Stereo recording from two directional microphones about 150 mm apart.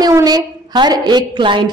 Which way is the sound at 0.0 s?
25° right (ahead or behind).